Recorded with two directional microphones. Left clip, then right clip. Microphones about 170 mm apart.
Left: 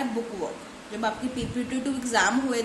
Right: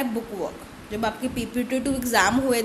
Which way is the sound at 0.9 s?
45° right (ahead or behind).